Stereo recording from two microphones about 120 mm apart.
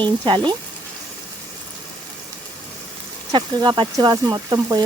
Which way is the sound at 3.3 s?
40° right (ahead or behind).